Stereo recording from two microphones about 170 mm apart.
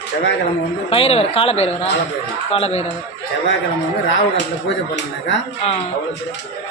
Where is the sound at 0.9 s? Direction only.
35° left (ahead or behind).